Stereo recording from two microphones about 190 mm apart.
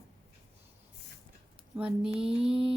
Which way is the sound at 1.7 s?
5° right (ahead or behind).